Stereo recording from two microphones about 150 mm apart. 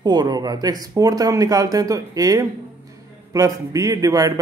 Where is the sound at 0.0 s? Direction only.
25° right (ahead or behind).